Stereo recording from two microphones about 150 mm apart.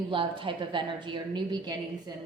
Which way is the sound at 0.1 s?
35° right (ahead or behind).